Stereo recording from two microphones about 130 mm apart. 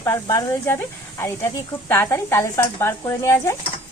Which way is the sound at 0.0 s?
20° left (ahead or behind).